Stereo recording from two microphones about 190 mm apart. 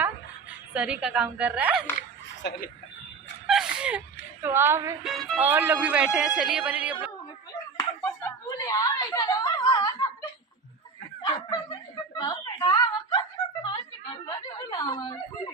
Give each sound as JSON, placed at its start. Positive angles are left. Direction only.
{"t": 0.7, "sound": "a woman's voice", "side_deg": -5}
{"t": 2.0, "sound": "speech", "side_deg": 50}
{"t": 3.4, "sound": "gasp", "side_deg": -5}
{"t": 4.4, "sound": "a man's voice", "side_deg": -10}
{"t": 5.0, "sound": "a woman's voice", "side_deg": 0}
{"t": 5.4, "sound": "a man's voice", "side_deg": -10}
{"t": 7.8, "sound": "snicker", "side_deg": 15}
{"t": 11.2, "sound": "a sound", "side_deg": 20}
{"t": 14.1, "sound": "snicker", "side_deg": 25}